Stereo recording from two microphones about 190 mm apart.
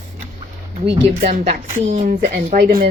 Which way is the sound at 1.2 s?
40° right (ahead or behind).